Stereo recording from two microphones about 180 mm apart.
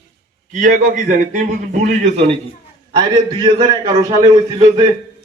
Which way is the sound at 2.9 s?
25° right (ahead or behind).